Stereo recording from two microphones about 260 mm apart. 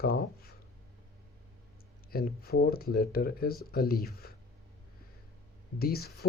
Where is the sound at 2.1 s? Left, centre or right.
Left.